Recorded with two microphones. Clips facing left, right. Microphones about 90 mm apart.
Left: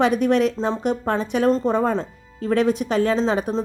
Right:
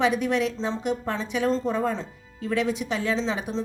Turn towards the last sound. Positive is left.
turn(degrees=45)  # may be behind; listen again after turning